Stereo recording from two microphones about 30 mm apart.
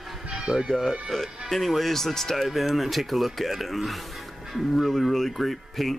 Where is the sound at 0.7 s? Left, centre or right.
Centre.